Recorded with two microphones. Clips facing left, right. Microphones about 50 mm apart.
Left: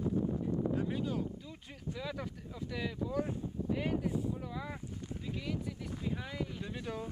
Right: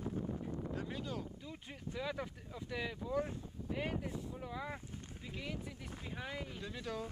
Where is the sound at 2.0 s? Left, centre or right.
Centre.